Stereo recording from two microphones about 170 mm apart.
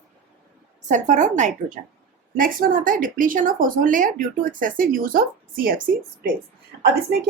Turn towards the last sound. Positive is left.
turn(degrees=-75)  # may be behind; listen again after turning